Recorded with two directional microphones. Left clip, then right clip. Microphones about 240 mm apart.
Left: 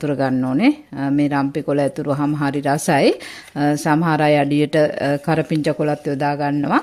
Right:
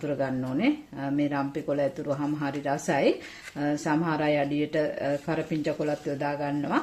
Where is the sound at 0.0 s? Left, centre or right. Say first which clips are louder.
Left 9 dB; left.